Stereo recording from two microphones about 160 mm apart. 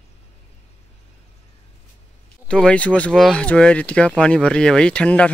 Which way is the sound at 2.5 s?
5° left (ahead or behind).